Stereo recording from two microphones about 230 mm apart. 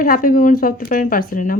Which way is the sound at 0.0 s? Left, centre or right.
Left.